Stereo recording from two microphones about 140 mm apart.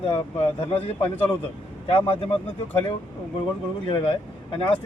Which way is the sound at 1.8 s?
40° left (ahead or behind).